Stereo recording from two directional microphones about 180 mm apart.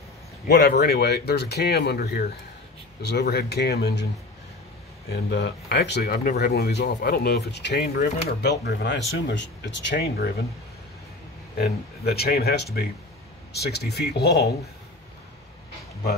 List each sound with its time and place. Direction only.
0.5 s speech: 65° left (ahead or behind)
5.1 s speech: 70° left (ahead or behind)
11.5 s speech: 60° left (ahead or behind)